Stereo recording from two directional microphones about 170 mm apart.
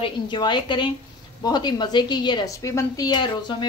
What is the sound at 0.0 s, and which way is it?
A woman's voice, 25° left (ahead or behind).